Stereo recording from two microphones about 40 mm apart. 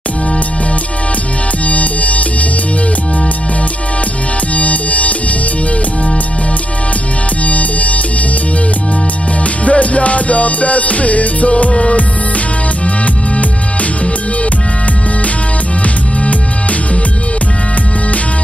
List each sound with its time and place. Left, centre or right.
1.7 s music: left
4.6 s music: left
7.4 s music: left
9.7 s music: left